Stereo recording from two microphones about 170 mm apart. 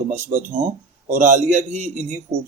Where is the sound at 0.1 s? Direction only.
50° right (ahead or behind).